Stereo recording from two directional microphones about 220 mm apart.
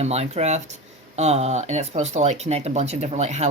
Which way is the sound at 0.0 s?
30° right (ahead or behind).